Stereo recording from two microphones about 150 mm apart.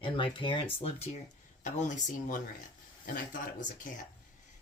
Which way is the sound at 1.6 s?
55° left (ahead or behind).